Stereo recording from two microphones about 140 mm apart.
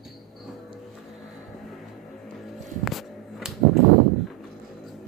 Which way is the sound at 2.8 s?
Centre (ahead or behind).